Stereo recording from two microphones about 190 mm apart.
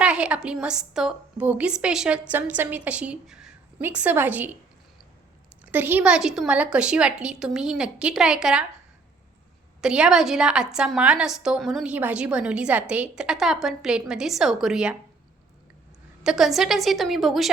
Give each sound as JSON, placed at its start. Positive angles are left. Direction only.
{"t": 0.0, "sound": "a woman's voice", "side_deg": -5}
{"t": 5.6, "sound": "a woman's voice", "side_deg": -10}
{"t": 9.8, "sound": "a woman's voice", "side_deg": -5}
{"t": 16.2, "sound": "a woman's voice", "side_deg": 0}